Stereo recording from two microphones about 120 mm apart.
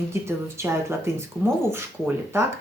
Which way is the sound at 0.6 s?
20° right (ahead or behind).